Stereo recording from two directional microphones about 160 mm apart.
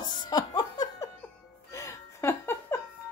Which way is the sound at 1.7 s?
20° left (ahead or behind).